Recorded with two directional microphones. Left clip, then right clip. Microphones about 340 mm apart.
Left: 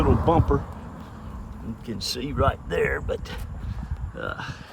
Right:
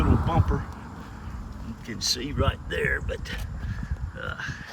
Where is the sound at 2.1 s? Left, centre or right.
Left.